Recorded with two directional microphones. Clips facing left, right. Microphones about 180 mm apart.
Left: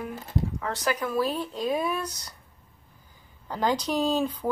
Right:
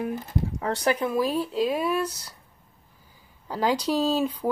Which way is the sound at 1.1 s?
10° right (ahead or behind).